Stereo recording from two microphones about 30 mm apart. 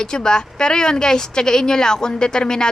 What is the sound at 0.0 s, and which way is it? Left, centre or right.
Speech, left.